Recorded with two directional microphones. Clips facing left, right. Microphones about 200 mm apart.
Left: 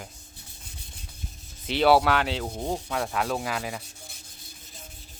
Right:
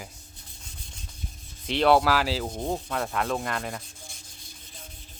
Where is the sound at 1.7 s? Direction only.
5° left (ahead or behind).